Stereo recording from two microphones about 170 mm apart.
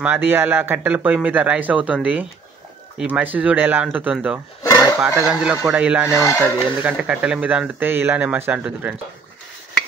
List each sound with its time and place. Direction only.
0.0 s speech: 10° right (ahead or behind)
3.0 s speech: 10° right (ahead or behind)
6.2 s speech: 15° left (ahead or behind)
6.6 s speech: 10° right (ahead or behind)